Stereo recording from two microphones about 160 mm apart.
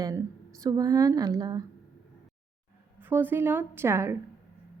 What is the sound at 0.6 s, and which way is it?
Speech, 25° right (ahead or behind).